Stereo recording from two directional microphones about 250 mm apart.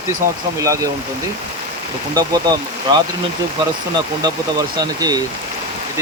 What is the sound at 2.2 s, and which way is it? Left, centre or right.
Speech, centre.